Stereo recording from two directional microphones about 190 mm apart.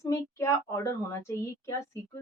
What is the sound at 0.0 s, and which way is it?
Speech, 15° left (ahead or behind).